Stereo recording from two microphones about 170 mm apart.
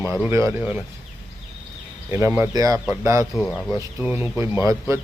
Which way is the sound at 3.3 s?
Centre (ahead or behind).